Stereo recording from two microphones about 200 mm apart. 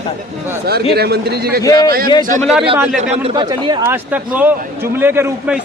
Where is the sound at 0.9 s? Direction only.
50° right (ahead or behind).